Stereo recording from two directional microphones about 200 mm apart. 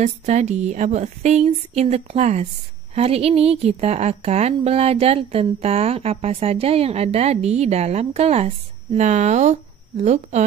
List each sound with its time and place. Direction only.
0.0 s a woman's voice: 35° right (ahead or behind)